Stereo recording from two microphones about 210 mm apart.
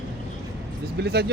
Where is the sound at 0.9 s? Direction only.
50° right (ahead or behind).